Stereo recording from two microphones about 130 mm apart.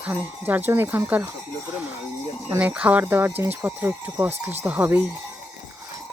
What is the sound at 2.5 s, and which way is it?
Speech, 10° right (ahead or behind).